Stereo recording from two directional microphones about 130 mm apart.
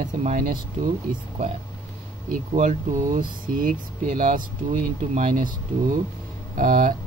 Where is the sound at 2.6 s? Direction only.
85° right; by 5.4 s 65° right (ahead or behind).